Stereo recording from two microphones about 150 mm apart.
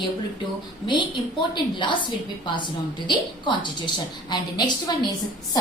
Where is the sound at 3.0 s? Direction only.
30° left (ahead or behind).